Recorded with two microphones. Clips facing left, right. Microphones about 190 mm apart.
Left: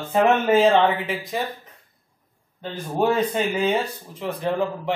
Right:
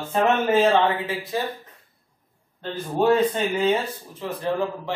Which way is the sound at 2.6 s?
10° left (ahead or behind).